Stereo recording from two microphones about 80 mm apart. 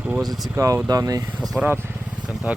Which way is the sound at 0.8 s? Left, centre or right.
Right.